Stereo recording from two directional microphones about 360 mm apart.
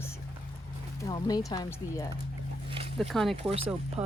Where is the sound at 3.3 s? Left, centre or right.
Centre.